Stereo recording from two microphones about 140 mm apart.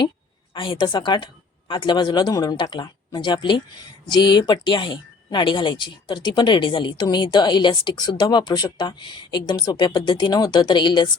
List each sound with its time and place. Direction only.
0.5 s speech: 35° left (ahead or behind)